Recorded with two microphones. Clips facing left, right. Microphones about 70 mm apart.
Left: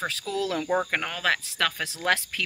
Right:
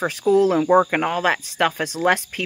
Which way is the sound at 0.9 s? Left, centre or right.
Centre.